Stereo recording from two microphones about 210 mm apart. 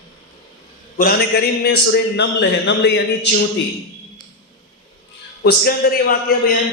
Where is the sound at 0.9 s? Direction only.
45° left (ahead or behind).